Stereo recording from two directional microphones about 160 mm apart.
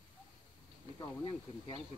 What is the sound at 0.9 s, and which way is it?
Snake, 30° left (ahead or behind).